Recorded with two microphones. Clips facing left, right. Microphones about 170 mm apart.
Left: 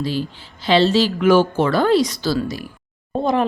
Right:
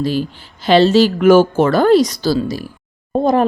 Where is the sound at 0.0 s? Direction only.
45° right (ahead or behind).